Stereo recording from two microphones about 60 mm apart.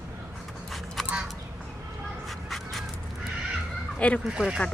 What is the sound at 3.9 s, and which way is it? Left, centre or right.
Fowl, left.